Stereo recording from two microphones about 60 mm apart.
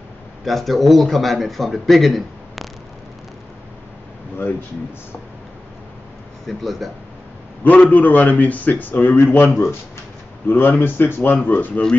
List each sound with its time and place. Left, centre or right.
0.5 s a man's voice: centre
4.4 s speech: left
6.4 s a man's voice: centre
7.6 s a man's voice: left